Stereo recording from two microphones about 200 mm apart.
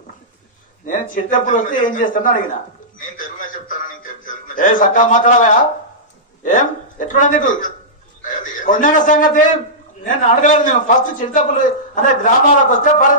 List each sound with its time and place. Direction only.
0.8 s a man's voice: 40° left (ahead or behind)
3.0 s a sound: 40° left (ahead or behind)
6.4 s a man's voice: 40° left (ahead or behind)